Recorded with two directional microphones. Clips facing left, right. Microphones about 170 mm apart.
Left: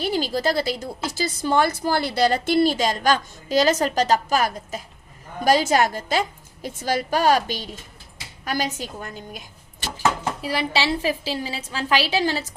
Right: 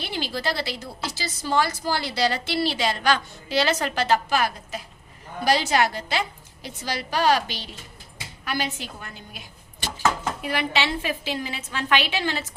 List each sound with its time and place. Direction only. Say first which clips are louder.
0.0 s a woman's voice: left 6 dB; 45° left (ahead or behind)
10.4 s a woman's voice: left 2 dB; 35° left (ahead or behind)